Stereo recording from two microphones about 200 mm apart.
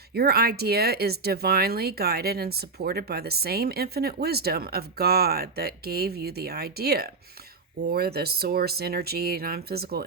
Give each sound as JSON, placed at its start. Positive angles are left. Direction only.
{"t": 0.1, "sound": "speech", "side_deg": -50}